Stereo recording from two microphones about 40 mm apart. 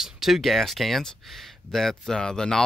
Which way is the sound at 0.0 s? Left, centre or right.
Centre.